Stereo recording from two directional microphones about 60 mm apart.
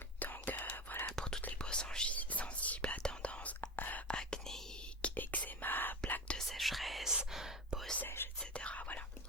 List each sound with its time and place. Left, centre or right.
0.2 s whispering: left
1.1 s whispering: centre
2.1 s whispering: left
4.1 s whispering: centre
5.0 s whispering: left
6.5 s whispering: centre
8.0 s whispering: left
8.4 s whispering: centre